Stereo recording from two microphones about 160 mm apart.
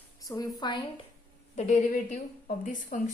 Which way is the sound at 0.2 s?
25° left (ahead or behind).